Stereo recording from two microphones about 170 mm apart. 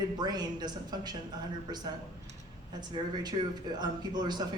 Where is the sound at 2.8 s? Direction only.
25° right (ahead or behind).